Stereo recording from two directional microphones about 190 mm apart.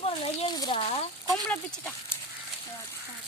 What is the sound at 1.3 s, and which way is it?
Speech, 5° left (ahead or behind).